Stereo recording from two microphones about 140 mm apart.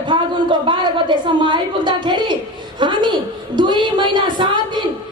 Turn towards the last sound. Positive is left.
turn(degrees=-35)  # may be behind; listen again after turning